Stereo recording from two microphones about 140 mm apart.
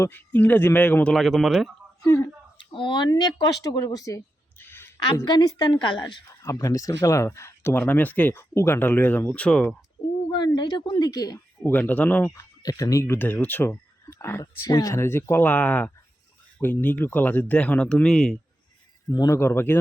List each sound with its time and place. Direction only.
0.0 s speech: 15° left (ahead or behind)
1.1 s speech: centre (ahead or behind)
2.0 s speech: 25° left (ahead or behind)
2.7 s speech: 35° left (ahead or behind)
4.6 s a sound: 15° left (ahead or behind)
5.2 s a woman's voice: 30° left (ahead or behind); by 9.7 s 10° left (ahead or behind)
10.3 s a woman's voice: 30° left (ahead or behind)
11.6 s speech: 10° left (ahead or behind)
12.3 s speech: 25° left (ahead or behind); by 18.3 s 5° left (ahead or behind)
19.1 s speech: 25° left (ahead or behind)